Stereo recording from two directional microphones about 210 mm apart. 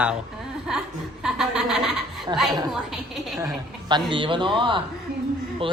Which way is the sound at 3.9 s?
25° right (ahead or behind).